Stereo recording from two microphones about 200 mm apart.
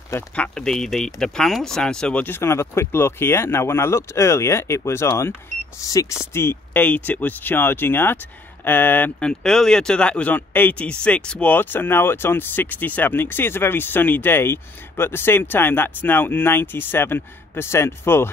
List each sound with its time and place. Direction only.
0.1 s speech: 5° left (ahead or behind)